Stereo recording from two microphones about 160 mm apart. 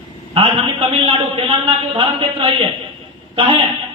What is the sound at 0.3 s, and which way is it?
A man's voice, 35° right (ahead or behind).